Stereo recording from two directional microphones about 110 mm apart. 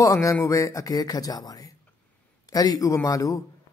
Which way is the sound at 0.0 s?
30° left (ahead or behind).